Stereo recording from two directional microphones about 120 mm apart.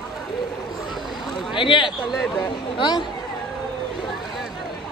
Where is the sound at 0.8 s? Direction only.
Centre (ahead or behind).